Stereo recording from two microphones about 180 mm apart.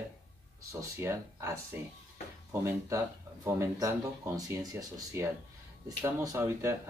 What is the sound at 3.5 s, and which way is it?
Speech, 15° right (ahead or behind).